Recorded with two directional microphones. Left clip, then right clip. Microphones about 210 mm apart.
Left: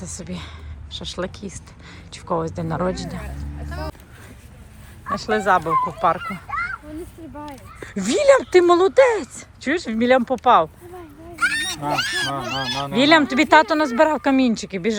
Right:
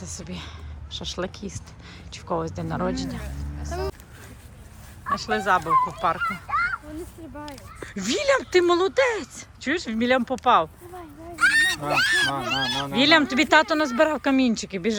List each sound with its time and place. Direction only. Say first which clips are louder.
0.0 s speech: left 3 dB; 10° right (ahead or behind)
3.7 s music: right 2 dB; 35° right (ahead or behind)
5.0 s speech: left 4 dB; 5° right (ahead or behind)
11.3 s a sound: right 3 dB; centre (ahead or behind)
11.9 s speech: right 1 dB; centre (ahead or behind)